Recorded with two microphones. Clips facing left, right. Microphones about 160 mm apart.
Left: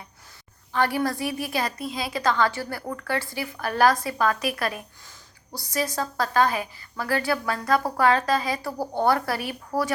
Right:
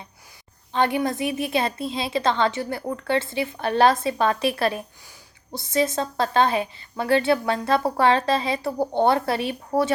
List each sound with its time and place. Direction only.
0.7 s a woman's voice: 20° right (ahead or behind)